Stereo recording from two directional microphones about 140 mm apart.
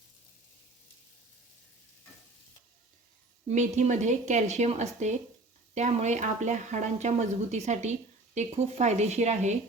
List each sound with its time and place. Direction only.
3.5 s speech: 60° right (ahead or behind)